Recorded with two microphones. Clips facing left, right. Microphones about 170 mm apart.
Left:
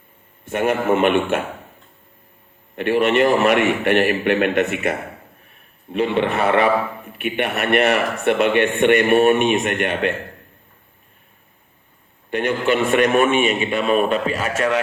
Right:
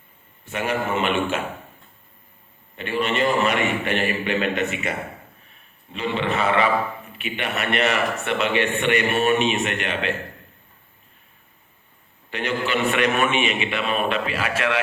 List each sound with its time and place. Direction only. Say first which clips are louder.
0.5 s a man's voice: left 6 dB; 55° left (ahead or behind)
2.7 s a man's voice: left 7 dB; 65° left (ahead or behind)
12.3 s a man's voice: left 6 dB; 50° left (ahead or behind)